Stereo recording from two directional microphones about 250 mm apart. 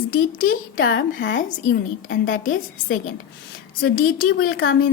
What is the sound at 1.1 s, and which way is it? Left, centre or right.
A woman's voice, left.